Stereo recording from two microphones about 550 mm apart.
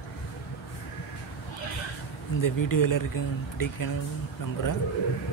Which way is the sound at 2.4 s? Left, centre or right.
Left.